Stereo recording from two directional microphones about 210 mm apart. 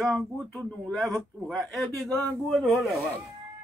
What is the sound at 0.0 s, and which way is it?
A man's voice, centre (ahead or behind).